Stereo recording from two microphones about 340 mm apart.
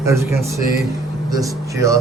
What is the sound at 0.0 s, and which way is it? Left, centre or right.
A man's voice, centre.